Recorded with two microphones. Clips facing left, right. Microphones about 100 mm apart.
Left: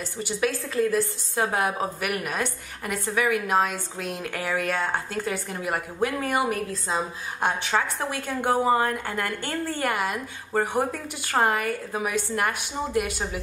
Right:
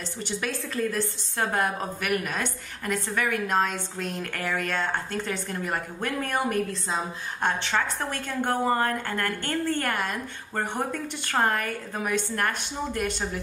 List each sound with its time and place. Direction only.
0.2 s a woman's voice: 5° left (ahead or behind)